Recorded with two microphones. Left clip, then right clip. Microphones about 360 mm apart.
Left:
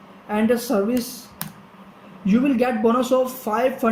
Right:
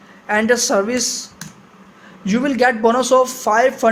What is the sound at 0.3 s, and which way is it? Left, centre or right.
Speech, right.